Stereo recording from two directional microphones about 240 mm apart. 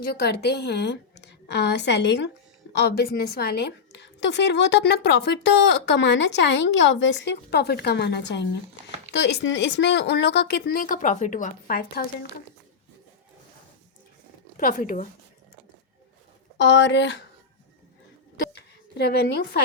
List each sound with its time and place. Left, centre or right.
0.0 s a woman's voice: left
14.5 s speech: left
16.6 s a woman's voice: left
18.5 s a sound: left